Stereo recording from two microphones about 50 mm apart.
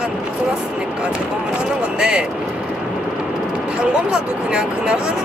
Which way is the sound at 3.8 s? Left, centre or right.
Centre.